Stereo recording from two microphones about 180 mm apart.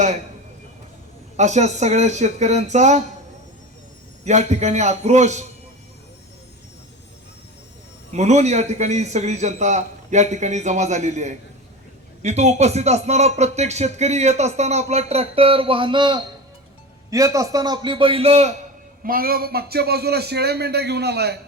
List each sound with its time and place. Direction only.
1.4 s speech: 40° right (ahead or behind)
4.2 s speech: 40° right (ahead or behind)
8.1 s a man's voice: 40° right (ahead or behind)
19.0 s a man's voice: 55° right (ahead or behind)